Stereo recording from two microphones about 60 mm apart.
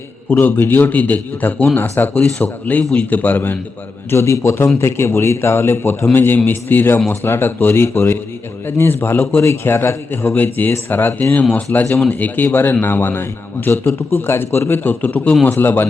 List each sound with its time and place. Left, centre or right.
0.3 s speech: left
4.1 s a man's voice: left
10.3 s a man's voice: left